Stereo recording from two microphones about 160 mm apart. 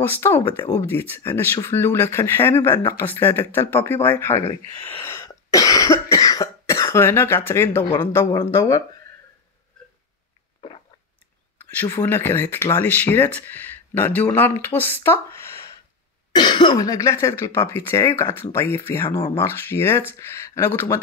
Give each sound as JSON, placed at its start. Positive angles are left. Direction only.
{"t": 0.0, "sound": "speech", "side_deg": 15}
{"t": 5.0, "sound": "cough", "side_deg": 20}
{"t": 8.0, "sound": "speech", "side_deg": 15}
{"t": 11.7, "sound": "speech", "side_deg": 15}
{"t": 16.3, "sound": "speech", "side_deg": 30}